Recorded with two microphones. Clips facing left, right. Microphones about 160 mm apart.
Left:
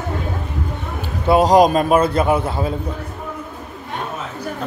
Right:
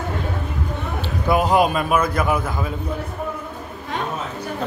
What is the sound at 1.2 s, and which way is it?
A man's voice, 35° left (ahead or behind).